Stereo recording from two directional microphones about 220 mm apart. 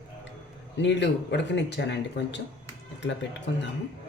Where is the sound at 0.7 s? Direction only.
55° left (ahead or behind).